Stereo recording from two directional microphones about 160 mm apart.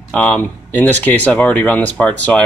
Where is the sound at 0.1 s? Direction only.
10° left (ahead or behind).